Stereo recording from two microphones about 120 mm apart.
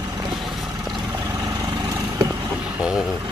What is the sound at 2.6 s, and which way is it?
Speech, 5° right (ahead or behind).